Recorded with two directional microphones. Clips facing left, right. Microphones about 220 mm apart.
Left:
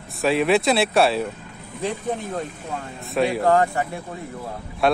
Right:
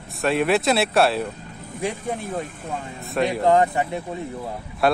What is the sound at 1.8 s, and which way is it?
Speech, 10° right (ahead or behind).